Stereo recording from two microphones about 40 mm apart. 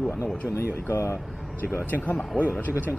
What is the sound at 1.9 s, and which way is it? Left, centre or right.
Speech, left.